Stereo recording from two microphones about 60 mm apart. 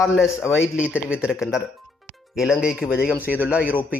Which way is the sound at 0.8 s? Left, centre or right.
Centre.